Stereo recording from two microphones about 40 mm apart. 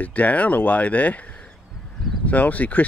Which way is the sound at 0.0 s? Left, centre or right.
Left.